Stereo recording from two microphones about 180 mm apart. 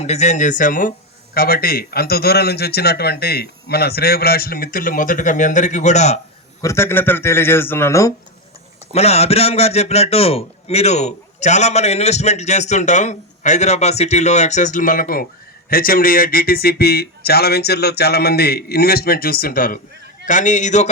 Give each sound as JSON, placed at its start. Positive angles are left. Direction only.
{"t": 0.0, "sound": "speech", "side_deg": 40}
{"t": 6.6, "sound": "speech", "side_deg": 15}
{"t": 8.9, "sound": "a man's voice", "side_deg": 35}